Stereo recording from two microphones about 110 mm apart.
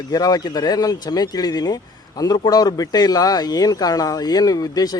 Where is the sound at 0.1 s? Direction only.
35° left (ahead or behind).